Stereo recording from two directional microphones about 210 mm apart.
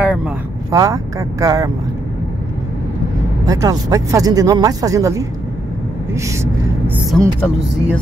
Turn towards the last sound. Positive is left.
turn(degrees=5)  # may be behind; listen again after turning